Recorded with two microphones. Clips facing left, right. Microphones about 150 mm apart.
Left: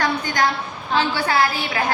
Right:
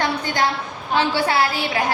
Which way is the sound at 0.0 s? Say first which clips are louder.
Even; 25° right (ahead or behind).